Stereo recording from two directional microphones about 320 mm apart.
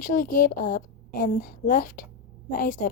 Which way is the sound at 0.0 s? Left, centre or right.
Left.